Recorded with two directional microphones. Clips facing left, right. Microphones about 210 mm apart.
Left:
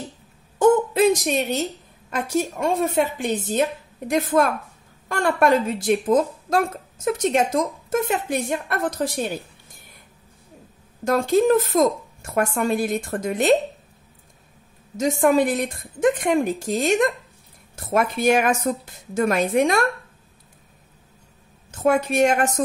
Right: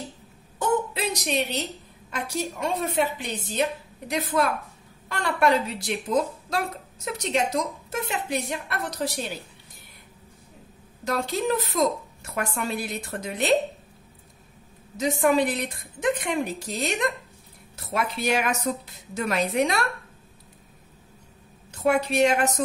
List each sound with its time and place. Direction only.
0.6 s a woman's voice: 50° left (ahead or behind)
11.1 s a woman's voice: 50° left (ahead or behind)
15.0 s a woman's voice: 45° left (ahead or behind)
21.7 s a woman's voice: 50° left (ahead or behind)